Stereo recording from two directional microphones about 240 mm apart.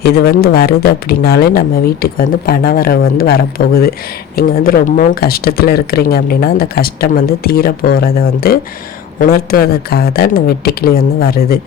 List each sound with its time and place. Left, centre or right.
0.0 s speech: left